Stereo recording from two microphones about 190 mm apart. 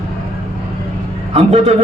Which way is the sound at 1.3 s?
35° right (ahead or behind).